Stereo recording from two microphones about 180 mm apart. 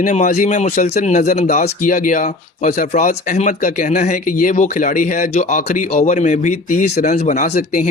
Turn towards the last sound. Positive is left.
turn(degrees=45)  # may be behind; listen again after turning